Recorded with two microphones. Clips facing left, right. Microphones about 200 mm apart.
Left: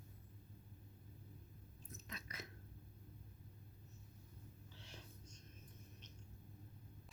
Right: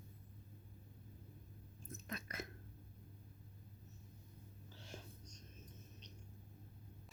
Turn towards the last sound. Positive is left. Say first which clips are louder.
# right 4 dB
turn(degrees=-45)  # may be behind; listen again after turning